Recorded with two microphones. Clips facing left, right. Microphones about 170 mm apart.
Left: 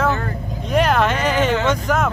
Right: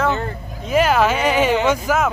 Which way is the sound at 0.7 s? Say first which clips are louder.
Right 1 dB; 5° right (ahead or behind).